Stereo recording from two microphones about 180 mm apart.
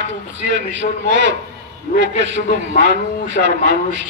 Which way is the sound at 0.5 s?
85° right.